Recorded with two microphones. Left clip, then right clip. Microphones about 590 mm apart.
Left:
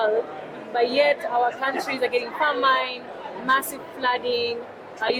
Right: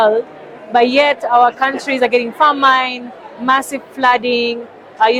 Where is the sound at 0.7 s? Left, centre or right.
Right.